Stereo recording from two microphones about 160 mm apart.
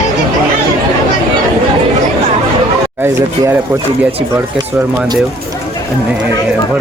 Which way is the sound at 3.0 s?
15° right (ahead or behind).